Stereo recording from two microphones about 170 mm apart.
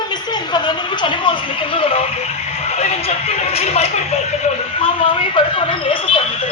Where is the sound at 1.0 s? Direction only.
30° left (ahead or behind).